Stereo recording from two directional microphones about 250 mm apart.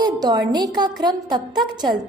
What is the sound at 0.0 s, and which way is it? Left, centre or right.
A woman's voice, centre.